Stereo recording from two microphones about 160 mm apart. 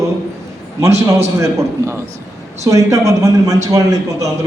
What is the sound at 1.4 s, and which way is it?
A man's voice, 20° right (ahead or behind).